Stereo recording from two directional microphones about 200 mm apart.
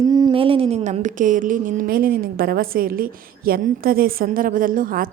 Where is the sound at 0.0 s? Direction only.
20° right (ahead or behind).